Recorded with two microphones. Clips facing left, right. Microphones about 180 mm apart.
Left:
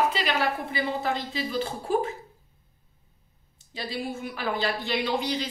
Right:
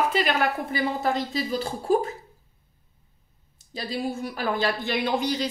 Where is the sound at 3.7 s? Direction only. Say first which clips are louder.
Right 3 dB; 40° right (ahead or behind).